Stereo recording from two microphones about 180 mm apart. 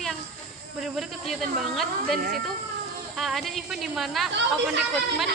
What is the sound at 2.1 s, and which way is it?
Speech, 50° right (ahead or behind).